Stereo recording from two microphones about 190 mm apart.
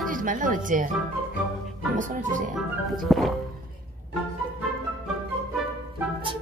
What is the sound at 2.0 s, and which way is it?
Speech, 40° right (ahead or behind).